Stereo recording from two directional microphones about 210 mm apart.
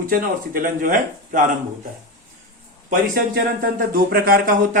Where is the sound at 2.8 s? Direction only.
45° right (ahead or behind).